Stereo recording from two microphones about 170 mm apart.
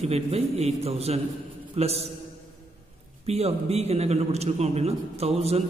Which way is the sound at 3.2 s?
40° right (ahead or behind).